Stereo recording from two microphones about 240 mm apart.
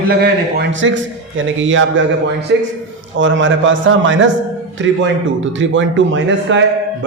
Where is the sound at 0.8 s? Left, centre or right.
Right.